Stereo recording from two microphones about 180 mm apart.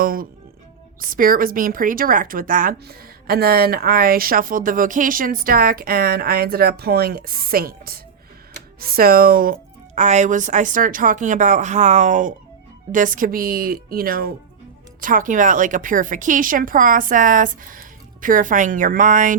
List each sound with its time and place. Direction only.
0.0 s a woman's voice: 50° right (ahead or behind)